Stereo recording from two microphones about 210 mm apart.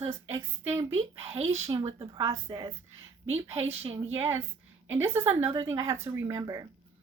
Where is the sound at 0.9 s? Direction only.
30° right (ahead or behind).